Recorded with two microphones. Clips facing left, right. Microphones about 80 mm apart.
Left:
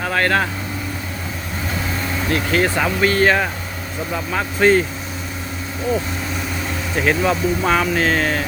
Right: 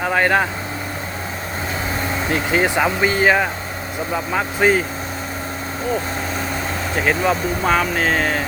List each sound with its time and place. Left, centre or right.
0.0 s speech: centre
2.3 s speech: centre
6.9 s speech: centre